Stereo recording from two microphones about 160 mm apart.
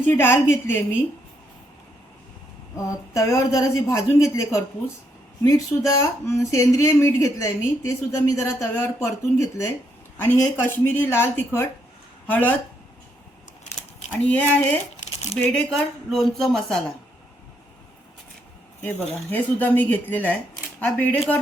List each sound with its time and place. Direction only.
0.0 s speech: 15° left (ahead or behind)
2.7 s speech: 20° left (ahead or behind)
14.1 s speech: 10° left (ahead or behind)
18.8 s speech: 10° left (ahead or behind)